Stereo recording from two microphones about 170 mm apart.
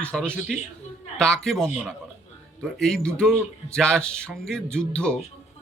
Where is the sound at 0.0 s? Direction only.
5° left (ahead or behind).